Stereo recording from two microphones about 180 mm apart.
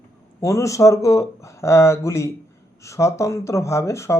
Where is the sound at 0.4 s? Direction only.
15° left (ahead or behind).